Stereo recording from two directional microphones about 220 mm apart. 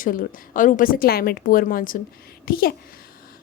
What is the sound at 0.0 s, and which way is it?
A woman's voice, 40° left (ahead or behind).